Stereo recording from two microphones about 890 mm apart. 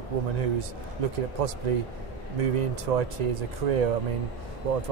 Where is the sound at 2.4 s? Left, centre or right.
Right.